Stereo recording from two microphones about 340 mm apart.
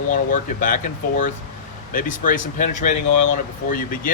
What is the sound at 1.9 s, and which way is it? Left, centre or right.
Speech, left.